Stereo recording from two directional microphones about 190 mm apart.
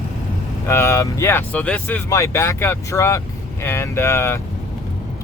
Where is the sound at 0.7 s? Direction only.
15° left (ahead or behind).